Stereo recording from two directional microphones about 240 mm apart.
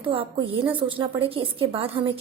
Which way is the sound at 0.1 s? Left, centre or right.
Right.